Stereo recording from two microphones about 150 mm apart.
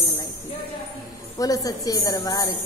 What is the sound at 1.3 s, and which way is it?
Speech, 25° left (ahead or behind).